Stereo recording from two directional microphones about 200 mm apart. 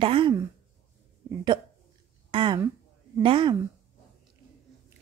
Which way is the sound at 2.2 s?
25° right (ahead or behind).